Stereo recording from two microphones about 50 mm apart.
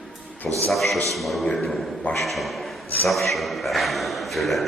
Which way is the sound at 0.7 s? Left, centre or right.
Centre.